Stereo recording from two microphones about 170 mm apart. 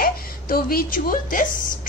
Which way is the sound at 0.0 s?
60° left (ahead or behind).